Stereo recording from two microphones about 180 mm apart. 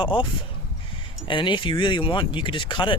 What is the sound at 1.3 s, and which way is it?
Speech, 25° left (ahead or behind).